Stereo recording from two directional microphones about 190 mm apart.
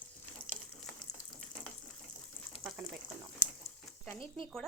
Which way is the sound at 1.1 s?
60° left (ahead or behind).